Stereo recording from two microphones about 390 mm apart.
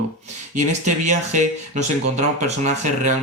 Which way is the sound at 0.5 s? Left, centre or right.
Centre.